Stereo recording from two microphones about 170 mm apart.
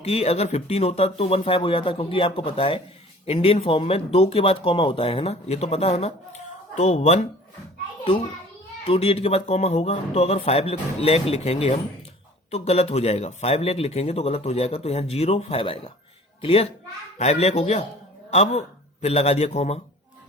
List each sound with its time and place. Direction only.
0.0 s speech: 35° left (ahead or behind)
8.9 s speech: 35° left (ahead or behind)